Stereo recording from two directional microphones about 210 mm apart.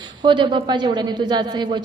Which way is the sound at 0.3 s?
25° right (ahead or behind).